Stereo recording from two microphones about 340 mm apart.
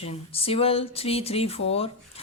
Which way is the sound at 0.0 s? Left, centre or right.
Centre.